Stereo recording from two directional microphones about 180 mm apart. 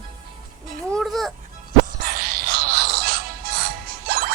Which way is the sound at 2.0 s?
55° right (ahead or behind).